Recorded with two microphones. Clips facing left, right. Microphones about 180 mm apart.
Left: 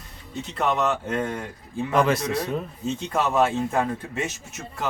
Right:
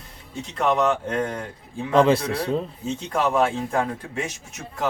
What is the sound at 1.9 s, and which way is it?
Speech, 30° right (ahead or behind).